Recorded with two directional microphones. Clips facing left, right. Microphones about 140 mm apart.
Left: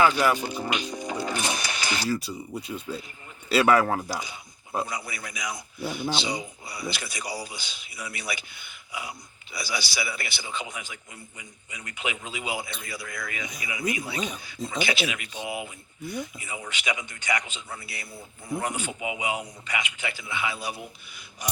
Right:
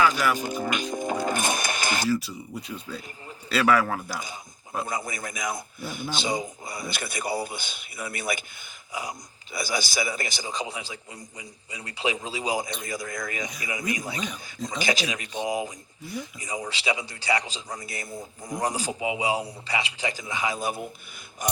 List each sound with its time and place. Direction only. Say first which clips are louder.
0.3 s speech: right 1 dB; 45° right (ahead or behind)
2.2 s speech: left 2 dB; 10° left (ahead or behind)
3.5 s speech: left 2 dB; 25° left (ahead or behind)
4.9 s speech: right 4 dB; 45° right (ahead or behind)